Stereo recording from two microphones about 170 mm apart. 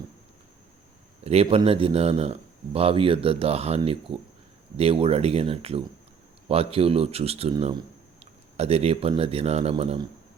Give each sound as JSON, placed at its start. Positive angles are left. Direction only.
{"t": 1.2, "sound": "speech", "side_deg": -35}